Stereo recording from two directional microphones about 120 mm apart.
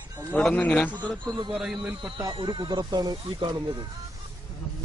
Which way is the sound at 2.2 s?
35° right (ahead or behind).